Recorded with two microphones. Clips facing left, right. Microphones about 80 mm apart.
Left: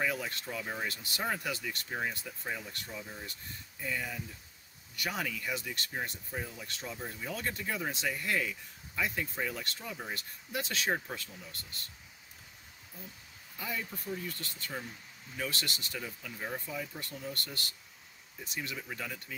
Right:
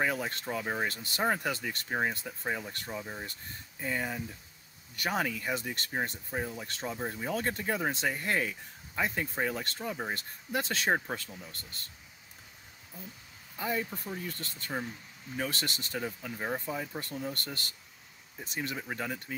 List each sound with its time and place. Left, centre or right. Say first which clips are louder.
0.0 s speech: right 3 dB; right
13.6 s speech: right 6 dB; right